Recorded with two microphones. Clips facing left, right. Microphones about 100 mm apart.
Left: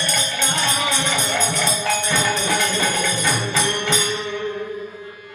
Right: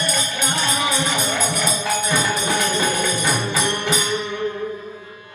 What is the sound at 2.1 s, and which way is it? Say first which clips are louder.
Music: right 1 dB; 20° right (ahead or behind).